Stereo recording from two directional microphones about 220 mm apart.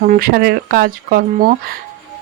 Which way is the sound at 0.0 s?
40° right (ahead or behind).